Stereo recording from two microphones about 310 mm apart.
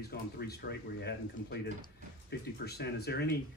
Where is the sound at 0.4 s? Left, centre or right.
Left.